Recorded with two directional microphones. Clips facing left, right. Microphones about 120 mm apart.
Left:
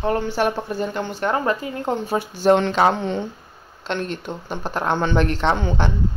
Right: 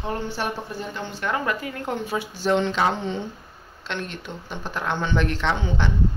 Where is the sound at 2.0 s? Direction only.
45° left (ahead or behind).